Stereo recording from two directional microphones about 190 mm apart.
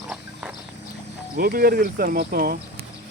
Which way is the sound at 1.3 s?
50° right (ahead or behind).